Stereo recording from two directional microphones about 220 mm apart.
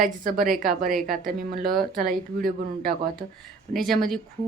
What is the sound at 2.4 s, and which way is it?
Speech, 40° right (ahead or behind).